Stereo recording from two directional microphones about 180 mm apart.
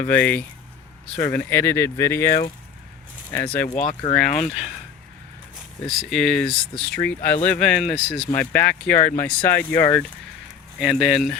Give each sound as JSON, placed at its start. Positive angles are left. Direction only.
{"t": 0.0, "sound": "speech", "side_deg": 10}
{"t": 4.0, "sound": "speech", "side_deg": 25}
{"t": 4.4, "sound": "speech", "side_deg": -5}
{"t": 5.8, "sound": "speech", "side_deg": 0}
{"t": 8.4, "sound": "speech", "side_deg": 10}
{"t": 10.8, "sound": "speech", "side_deg": 0}